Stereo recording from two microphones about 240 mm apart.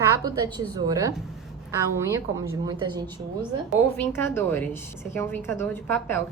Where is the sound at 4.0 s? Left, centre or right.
Centre.